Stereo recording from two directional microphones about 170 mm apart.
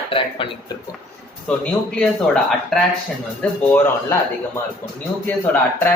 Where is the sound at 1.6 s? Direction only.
5° left (ahead or behind).